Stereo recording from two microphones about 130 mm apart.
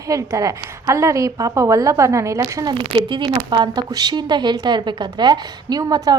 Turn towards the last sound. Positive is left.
turn(degrees=-30)  # may be behind; listen again after turning